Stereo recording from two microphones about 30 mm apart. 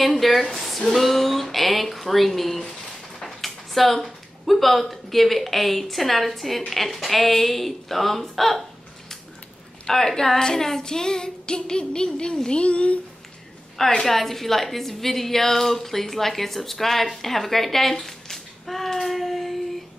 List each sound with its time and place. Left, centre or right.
0.0 s speech: centre
9.8 s a woman's voice: centre
10.8 s child singing: left
12.4 s a child's voice: left
14.0 s a woman's voice: centre